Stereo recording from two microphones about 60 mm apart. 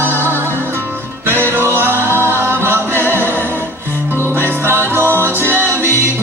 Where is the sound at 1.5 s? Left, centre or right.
Right.